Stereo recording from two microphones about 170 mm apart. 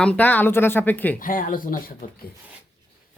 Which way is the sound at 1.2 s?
55° left (ahead or behind).